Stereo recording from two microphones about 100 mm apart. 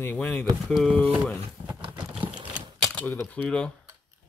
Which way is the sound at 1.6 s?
55° right (ahead or behind).